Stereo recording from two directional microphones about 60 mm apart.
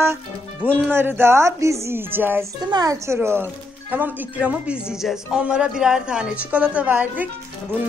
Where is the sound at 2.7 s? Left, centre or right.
Right.